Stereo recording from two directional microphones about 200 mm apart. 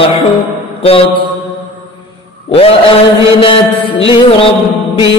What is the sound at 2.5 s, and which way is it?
Music, 30° left (ahead or behind).